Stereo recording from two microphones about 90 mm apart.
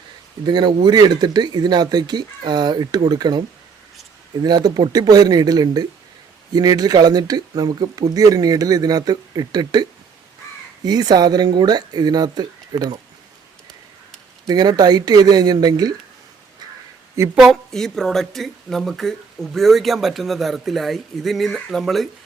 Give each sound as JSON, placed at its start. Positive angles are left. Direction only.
{"t": 0.4, "sound": "speech", "side_deg": -55}
{"t": 4.4, "sound": "speech", "side_deg": -45}
{"t": 10.8, "sound": "speech", "side_deg": -50}
{"t": 14.4, "sound": "speech", "side_deg": -50}
{"t": 17.3, "sound": "speech", "side_deg": 0}